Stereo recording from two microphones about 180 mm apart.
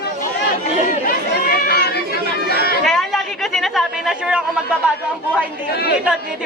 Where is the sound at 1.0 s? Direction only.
60° left (ahead or behind).